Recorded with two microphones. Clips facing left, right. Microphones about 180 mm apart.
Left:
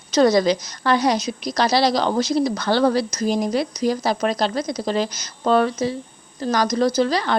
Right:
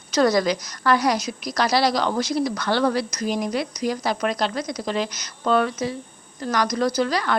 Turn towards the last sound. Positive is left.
turn(degrees=30)  # may be behind; listen again after turning